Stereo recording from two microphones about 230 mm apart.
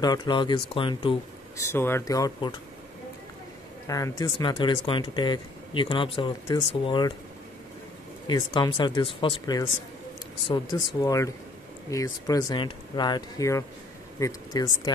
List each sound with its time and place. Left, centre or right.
0.0 s speech: centre
1.7 s speech: centre
3.8 s speech: centre
8.3 s speech: centre